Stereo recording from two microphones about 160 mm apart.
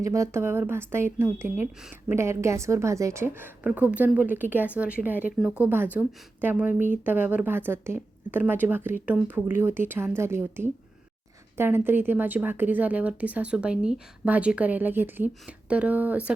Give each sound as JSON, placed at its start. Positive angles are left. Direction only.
{"t": 0.0, "sound": "speech", "side_deg": -20}